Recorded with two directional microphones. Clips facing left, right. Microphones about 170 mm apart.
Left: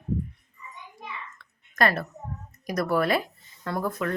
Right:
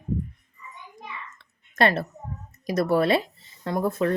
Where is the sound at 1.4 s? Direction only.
25° right (ahead or behind).